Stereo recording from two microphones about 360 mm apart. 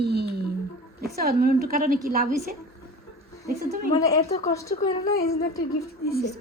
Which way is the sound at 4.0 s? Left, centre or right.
Centre.